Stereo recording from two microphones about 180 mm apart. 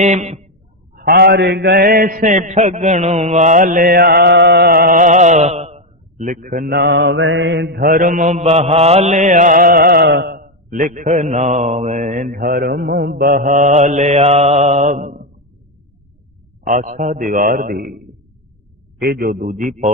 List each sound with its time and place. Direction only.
0.0 s speech: 40° right (ahead or behind)
0.9 s mantra: 60° right (ahead or behind)
16.6 s mantra: 45° right (ahead or behind)
18.9 s mantra: 60° right (ahead or behind)